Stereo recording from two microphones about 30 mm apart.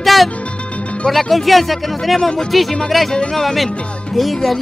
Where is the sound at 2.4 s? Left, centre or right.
Centre.